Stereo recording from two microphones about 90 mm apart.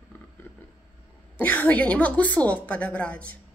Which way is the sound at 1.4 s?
15° left (ahead or behind).